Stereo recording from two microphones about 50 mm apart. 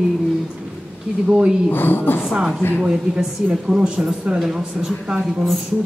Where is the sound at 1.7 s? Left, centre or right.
Left.